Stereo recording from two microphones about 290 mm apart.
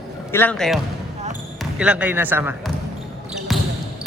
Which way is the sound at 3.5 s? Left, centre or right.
Centre.